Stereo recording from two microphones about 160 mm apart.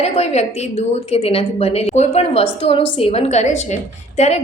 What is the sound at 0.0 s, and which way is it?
A woman's voice, 40° left (ahead or behind).